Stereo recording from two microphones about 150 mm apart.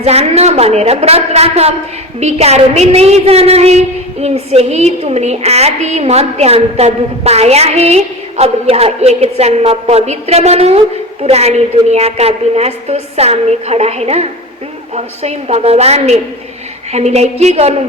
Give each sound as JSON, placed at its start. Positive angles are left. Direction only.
{"t": 0.0, "sound": "a woman's voice", "side_deg": -45}